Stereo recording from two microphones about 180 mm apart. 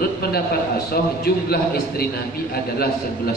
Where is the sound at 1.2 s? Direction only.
60° left (ahead or behind).